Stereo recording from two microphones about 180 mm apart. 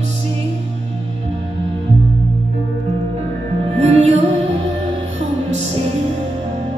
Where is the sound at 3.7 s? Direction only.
40° right (ahead or behind).